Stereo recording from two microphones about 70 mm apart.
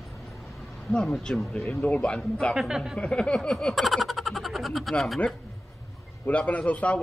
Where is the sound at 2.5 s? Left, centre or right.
Centre.